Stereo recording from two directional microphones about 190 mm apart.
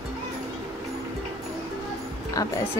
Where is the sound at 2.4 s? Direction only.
20° left (ahead or behind).